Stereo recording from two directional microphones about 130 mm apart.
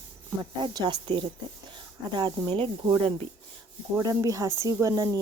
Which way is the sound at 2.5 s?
40° right (ahead or behind).